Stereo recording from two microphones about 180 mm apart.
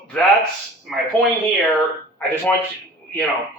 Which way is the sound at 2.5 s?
10° left (ahead or behind).